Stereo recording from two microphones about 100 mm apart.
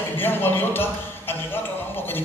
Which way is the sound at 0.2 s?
20° left (ahead or behind).